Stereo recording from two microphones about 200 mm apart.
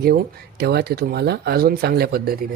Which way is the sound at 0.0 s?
50° right (ahead or behind).